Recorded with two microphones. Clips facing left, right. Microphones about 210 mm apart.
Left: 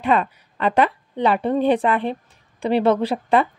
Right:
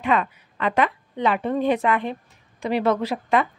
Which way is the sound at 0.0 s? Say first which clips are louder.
Left 3 dB; 35° left (ahead or behind).